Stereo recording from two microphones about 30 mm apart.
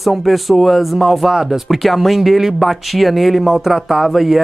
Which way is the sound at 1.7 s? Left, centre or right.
Centre.